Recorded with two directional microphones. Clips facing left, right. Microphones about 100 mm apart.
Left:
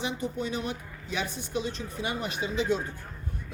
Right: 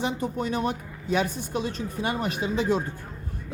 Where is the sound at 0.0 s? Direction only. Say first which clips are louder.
Right 4 dB; 45° right (ahead or behind).